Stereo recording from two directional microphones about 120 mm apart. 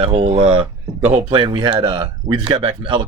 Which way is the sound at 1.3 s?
40° right (ahead or behind).